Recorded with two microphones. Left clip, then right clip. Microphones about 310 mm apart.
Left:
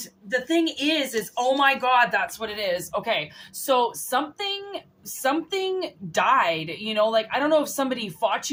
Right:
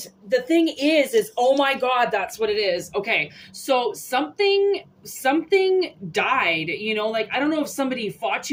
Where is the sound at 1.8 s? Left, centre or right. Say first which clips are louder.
Left 1 dB; left.